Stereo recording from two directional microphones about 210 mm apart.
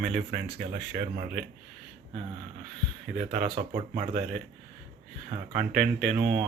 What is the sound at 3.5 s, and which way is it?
Speech, 25° right (ahead or behind).